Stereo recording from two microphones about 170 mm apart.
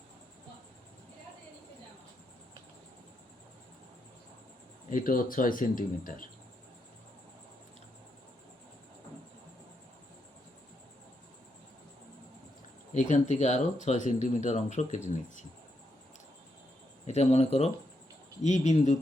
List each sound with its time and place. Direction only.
4.9 s speech: 55° left (ahead or behind)
12.9 s speech: 45° left (ahead or behind)
17.1 s speech: 40° left (ahead or behind)